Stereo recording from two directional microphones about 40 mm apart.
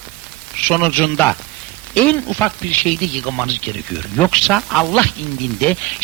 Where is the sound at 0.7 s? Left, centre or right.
Left.